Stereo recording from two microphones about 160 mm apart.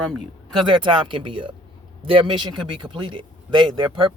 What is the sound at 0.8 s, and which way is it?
Speech, 30° right (ahead or behind).